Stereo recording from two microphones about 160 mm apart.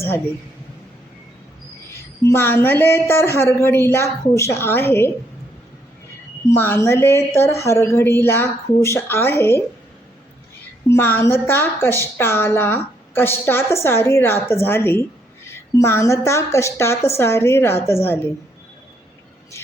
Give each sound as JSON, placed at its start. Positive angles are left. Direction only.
{"t": 1.9, "sound": "a woman's voice", "side_deg": 15}
{"t": 6.5, "sound": "a woman's voice", "side_deg": 15}
{"t": 10.8, "sound": "a woman's voice", "side_deg": 15}
{"t": 19.6, "sound": "a woman's voice", "side_deg": 15}